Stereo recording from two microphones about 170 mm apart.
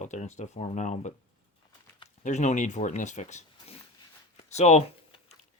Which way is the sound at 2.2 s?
45° left (ahead or behind).